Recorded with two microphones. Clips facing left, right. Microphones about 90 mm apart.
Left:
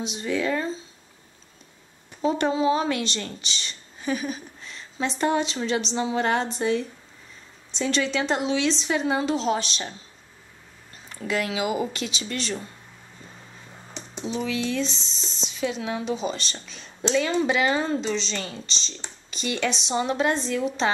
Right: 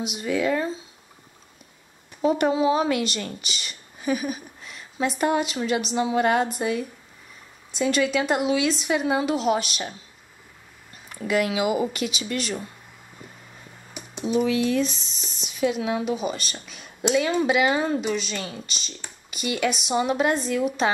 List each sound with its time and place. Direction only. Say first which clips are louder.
0.0 s a woman's voice: right 2 dB; 10° right (ahead or behind)
2.2 s a woman's voice: right 2 dB; 10° right (ahead or behind)
11.1 s a woman's voice: right 4 dB; 15° right (ahead or behind)
13.9 s computer keyboard: right 6 dB; 10° right (ahead or behind)
14.8 s speech: right 3 dB; 25° left (ahead or behind)
15.8 s a woman's voice: right 2 dB; 10° right (ahead or behind)